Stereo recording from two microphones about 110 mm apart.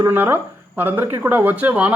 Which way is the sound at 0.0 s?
20° right (ahead or behind).